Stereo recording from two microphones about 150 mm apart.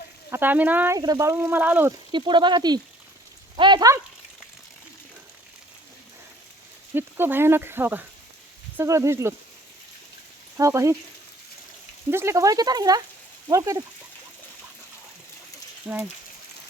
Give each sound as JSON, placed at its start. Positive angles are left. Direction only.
{"t": 0.3, "sound": "speech", "side_deg": -15}
{"t": 0.9, "sound": "speech", "side_deg": -25}
{"t": 2.1, "sound": "speech", "side_deg": -30}
{"t": 6.9, "sound": "speech", "side_deg": -15}
{"t": 10.6, "sound": "speech", "side_deg": -20}
{"t": 12.1, "sound": "speech", "side_deg": -20}
{"t": 15.9, "sound": "speech", "side_deg": -5}